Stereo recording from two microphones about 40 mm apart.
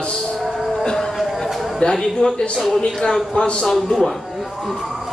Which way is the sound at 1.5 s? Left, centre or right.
Centre.